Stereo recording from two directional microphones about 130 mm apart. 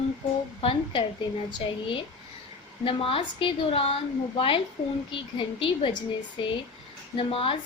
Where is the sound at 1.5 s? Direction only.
35° left (ahead or behind).